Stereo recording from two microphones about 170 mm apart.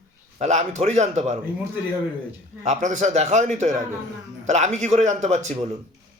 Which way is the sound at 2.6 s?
45° right (ahead or behind).